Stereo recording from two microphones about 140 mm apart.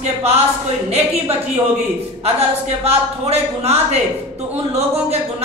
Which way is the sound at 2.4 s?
50° right (ahead or behind).